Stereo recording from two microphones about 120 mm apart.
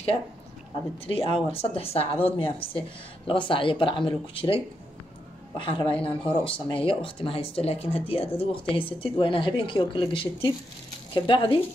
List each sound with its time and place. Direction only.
1.0 s a woman's voice: 50° left (ahead or behind)
5.6 s a woman's voice: 45° left (ahead or behind)